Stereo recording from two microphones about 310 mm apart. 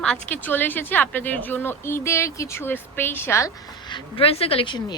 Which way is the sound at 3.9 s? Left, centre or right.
Centre.